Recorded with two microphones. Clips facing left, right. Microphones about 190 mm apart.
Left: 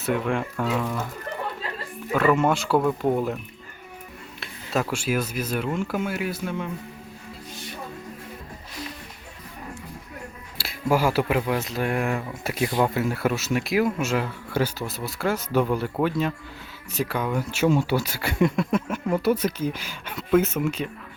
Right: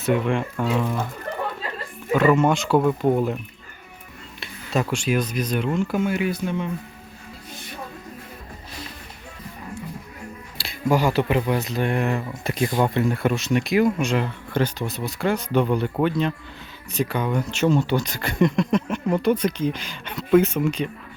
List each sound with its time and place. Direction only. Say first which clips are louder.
0.0 s speech: right 3 dB; 5° left (ahead or behind)
2.1 s speech: right 3 dB; centre (ahead or behind)
4.4 s speech: right 2 dB; 5° left (ahead or behind)
10.6 s speech: right 1 dB; 5° left (ahead or behind)